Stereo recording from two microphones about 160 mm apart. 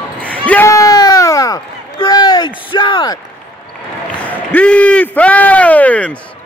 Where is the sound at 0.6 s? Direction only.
20° left (ahead or behind).